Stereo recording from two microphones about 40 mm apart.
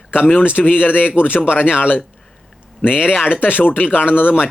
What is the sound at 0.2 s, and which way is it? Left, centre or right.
Speech, left.